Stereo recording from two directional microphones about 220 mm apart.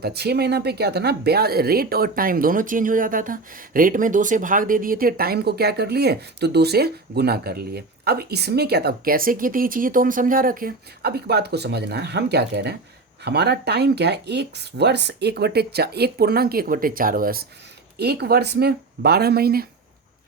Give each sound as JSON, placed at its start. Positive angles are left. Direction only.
{"t": 0.0, "sound": "speech", "side_deg": -45}